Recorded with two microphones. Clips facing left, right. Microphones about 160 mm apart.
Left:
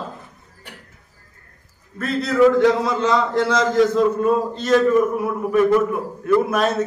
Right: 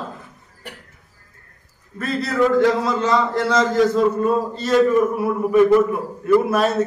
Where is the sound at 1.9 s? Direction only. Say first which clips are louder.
Left 3 dB; centre (ahead or behind).